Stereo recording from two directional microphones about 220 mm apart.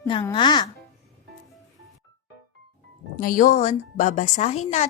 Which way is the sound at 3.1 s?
40° left (ahead or behind).